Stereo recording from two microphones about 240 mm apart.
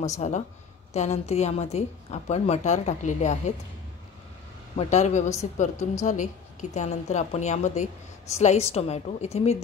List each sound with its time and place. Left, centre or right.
0.0 s a woman's voice: left
4.7 s a woman's voice: left